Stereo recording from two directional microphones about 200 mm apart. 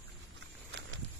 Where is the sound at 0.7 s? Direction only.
65° right (ahead or behind).